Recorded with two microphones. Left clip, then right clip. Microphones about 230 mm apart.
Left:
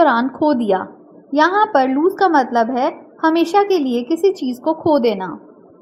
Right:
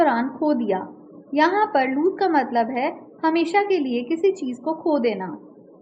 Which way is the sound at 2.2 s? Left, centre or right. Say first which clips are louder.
Left 7 dB; centre.